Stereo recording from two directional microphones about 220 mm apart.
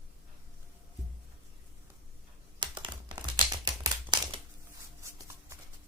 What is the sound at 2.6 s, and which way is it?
Typing, 20° right (ahead or behind).